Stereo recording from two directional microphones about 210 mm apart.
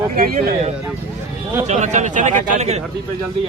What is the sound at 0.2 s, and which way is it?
Speech, 45° right (ahead or behind).